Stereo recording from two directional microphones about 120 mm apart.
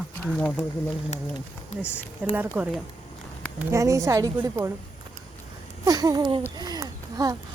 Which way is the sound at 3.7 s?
25° right (ahead or behind).